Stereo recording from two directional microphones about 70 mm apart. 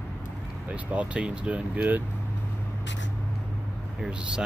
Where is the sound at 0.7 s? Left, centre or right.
Centre.